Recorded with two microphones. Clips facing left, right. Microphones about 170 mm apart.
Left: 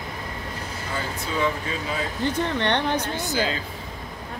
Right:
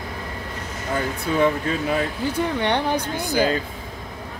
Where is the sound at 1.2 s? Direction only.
55° right (ahead or behind).